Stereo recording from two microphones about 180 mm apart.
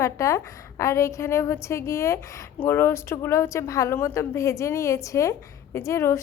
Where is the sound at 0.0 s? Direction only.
15° left (ahead or behind).